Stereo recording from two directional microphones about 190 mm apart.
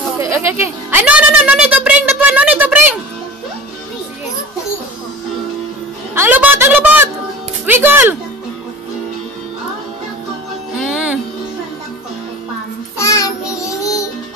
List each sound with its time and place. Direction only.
0.2 s music: 15° right (ahead or behind)
0.8 s a sound: 10° right (ahead or behind)
6.1 s a sound: 10° right (ahead or behind)
7.6 s speech: 10° right (ahead or behind)
10.8 s music: 5° right (ahead or behind)
12.9 s child singing: 15° left (ahead or behind)